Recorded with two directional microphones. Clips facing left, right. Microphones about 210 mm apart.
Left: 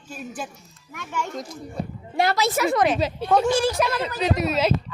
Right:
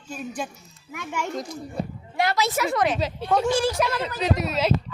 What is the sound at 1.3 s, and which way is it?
Speech, centre (ahead or behind).